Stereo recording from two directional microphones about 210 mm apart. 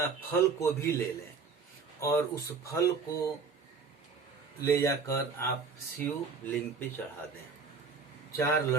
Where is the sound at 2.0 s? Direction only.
15° left (ahead or behind).